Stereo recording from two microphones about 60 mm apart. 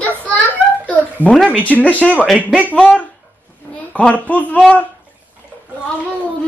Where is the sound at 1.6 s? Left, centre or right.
Left.